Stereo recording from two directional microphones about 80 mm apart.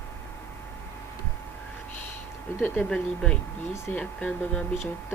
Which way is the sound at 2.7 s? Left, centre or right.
Centre.